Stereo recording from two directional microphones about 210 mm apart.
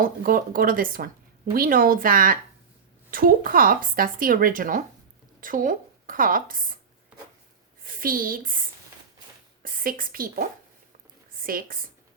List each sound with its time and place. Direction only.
0.0 s a woman's voice: 40° right (ahead or behind)
7.9 s speech: 40° right (ahead or behind)
9.6 s speech: 40° right (ahead or behind)
11.4 s speech: 40° right (ahead or behind)